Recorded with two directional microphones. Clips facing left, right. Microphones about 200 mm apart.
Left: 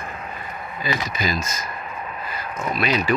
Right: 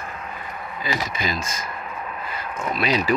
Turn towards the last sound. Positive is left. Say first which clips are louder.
# even
turn(degrees=-30)  # may be behind; listen again after turning